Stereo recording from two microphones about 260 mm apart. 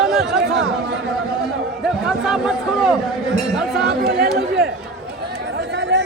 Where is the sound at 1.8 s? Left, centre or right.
Centre.